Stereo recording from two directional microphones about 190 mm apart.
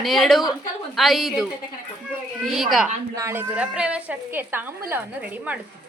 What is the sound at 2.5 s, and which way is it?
Speech, centre (ahead or behind).